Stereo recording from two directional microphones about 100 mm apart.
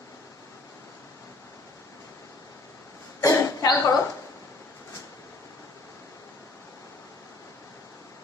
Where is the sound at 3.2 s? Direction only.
35° left (ahead or behind).